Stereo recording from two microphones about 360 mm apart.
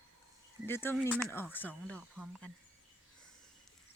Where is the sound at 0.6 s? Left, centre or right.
Centre.